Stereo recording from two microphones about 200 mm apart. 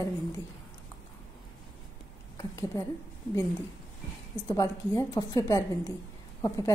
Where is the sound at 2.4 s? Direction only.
15° left (ahead or behind).